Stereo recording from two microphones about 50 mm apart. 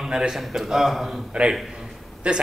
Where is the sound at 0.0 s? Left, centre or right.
Centre.